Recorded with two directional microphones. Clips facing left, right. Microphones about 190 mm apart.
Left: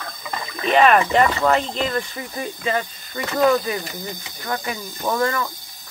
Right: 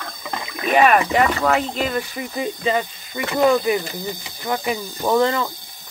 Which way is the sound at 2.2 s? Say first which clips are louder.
Right 4 dB; 20° right (ahead or behind).